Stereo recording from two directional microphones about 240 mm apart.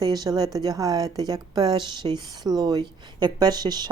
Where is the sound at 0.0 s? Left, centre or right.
Centre.